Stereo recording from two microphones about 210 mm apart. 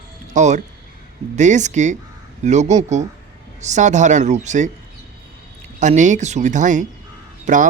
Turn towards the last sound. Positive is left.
turn(degrees=-35)  # may be behind; listen again after turning